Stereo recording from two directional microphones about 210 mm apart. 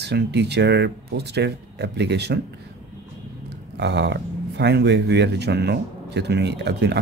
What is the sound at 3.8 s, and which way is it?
Speech, 55° right (ahead or behind).